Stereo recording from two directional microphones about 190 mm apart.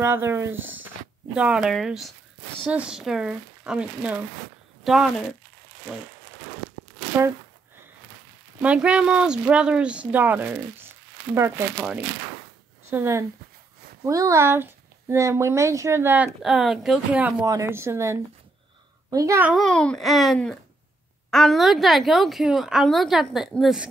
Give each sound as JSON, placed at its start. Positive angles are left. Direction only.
{"t": 0.0, "sound": "a woman's voice", "side_deg": -15}
{"t": 8.6, "sound": "a woman's voice", "side_deg": -5}
{"t": 19.5, "sound": "a woman's voice", "side_deg": 5}